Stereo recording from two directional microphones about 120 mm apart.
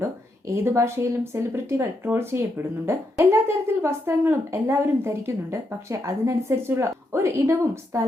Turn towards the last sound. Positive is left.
turn(degrees=-25)  # may be behind; listen again after turning